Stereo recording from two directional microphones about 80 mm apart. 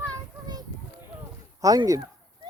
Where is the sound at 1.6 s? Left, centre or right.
Right.